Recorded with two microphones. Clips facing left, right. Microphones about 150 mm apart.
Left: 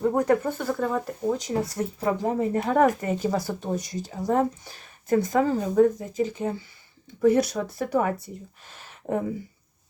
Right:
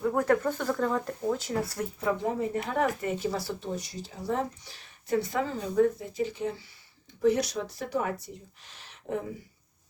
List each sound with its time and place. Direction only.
0.2 s speech: 15° left (ahead or behind)
1.3 s speech: 20° left (ahead or behind)
2.0 s speech: 35° left (ahead or behind)
7.2 s speech: 55° left (ahead or behind)
8.6 s a sound: 50° left (ahead or behind)